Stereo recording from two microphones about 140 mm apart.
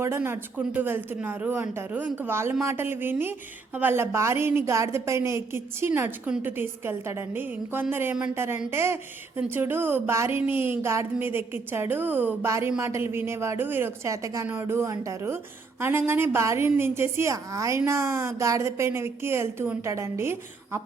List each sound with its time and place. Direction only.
0.2 s a woman's voice: 15° right (ahead or behind)